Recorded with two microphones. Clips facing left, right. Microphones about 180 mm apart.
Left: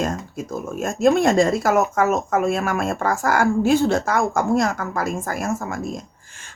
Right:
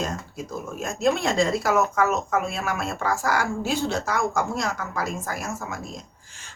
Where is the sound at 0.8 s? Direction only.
50° left (ahead or behind).